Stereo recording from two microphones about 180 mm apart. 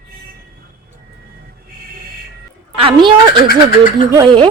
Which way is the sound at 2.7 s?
30° right (ahead or behind).